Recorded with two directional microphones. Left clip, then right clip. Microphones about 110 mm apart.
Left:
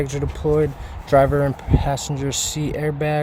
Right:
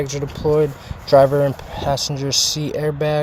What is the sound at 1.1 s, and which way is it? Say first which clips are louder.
Speech: right 3 dB; 25° left (ahead or behind).